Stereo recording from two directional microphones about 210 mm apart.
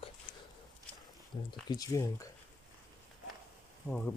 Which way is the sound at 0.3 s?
60° left (ahead or behind).